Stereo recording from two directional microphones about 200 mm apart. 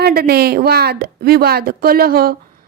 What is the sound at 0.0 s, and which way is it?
A woman's voice, 50° right (ahead or behind).